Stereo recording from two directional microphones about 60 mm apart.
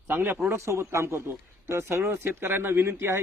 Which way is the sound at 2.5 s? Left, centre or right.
Right.